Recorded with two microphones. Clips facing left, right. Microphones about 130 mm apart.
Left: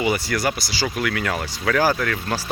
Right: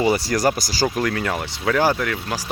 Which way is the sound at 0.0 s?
35° right (ahead or behind).